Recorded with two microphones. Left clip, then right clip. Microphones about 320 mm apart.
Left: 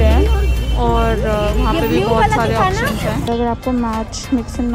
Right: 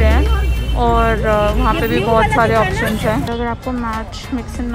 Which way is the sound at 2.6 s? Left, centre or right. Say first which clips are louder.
Left 1 dB; left.